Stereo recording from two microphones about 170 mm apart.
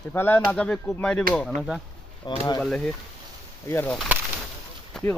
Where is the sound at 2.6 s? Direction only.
5° left (ahead or behind).